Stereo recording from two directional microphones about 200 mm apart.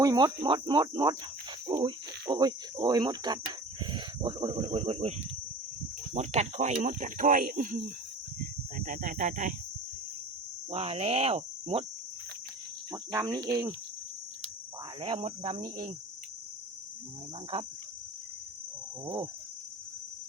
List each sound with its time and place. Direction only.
0.0 s speech: 20° right (ahead or behind)
6.1 s speech: 35° right (ahead or behind)
10.7 s speech: 30° right (ahead or behind)
12.9 s speech: 20° right (ahead or behind)
15.0 s speech: 25° right (ahead or behind)
19.0 s speech: 25° right (ahead or behind)